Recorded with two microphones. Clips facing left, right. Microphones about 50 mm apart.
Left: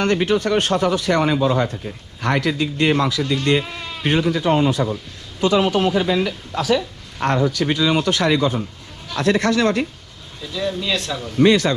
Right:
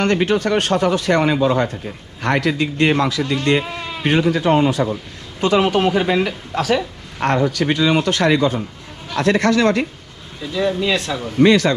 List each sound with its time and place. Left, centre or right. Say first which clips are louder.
0.0 s speech: right 1 dB; right
3.6 s sheep: right 3 dB; centre
4.0 s speech: right 2 dB; right
7.2 s speech: right 1 dB; right
10.4 s speech: right 5 dB; centre
11.4 s speech: right 2 dB; right